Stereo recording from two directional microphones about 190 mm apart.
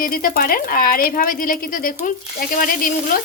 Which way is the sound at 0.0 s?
50° left (ahead or behind).